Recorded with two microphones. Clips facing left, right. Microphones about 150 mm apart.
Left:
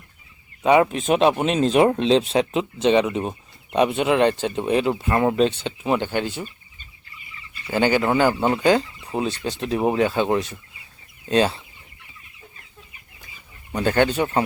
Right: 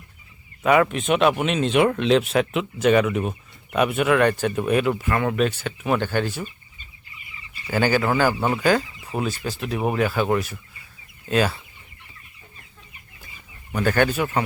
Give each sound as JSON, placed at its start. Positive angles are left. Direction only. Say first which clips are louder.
{"t": 0.6, "sound": "speech", "louder": "left 2 dB", "side_deg": 25}
{"t": 7.7, "sound": "speech", "louder": "left 1 dB", "side_deg": 20}
{"t": 13.7, "sound": "speech", "louder": "left 1 dB", "side_deg": 20}